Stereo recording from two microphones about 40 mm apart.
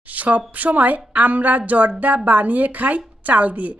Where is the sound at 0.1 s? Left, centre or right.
Right.